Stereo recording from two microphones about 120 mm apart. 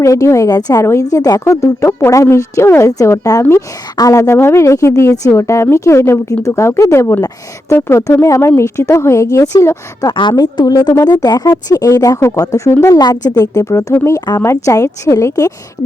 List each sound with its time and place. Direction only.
0.0 s speech: 25° left (ahead or behind)
10.2 s speech: 40° left (ahead or behind)